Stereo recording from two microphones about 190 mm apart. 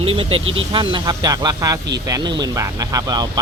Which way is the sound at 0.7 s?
25° right (ahead or behind).